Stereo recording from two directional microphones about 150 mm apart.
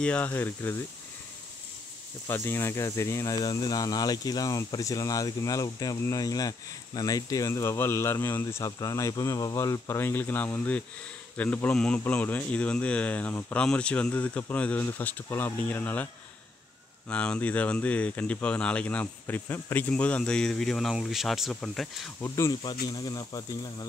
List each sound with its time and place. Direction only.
0.0 s speech: 10° left (ahead or behind)
2.2 s speech: 15° left (ahead or behind)
17.1 s speech: 10° left (ahead or behind)
22.2 s speech: 20° left (ahead or behind)